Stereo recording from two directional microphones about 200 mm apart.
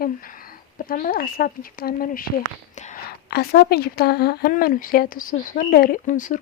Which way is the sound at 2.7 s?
35° left (ahead or behind).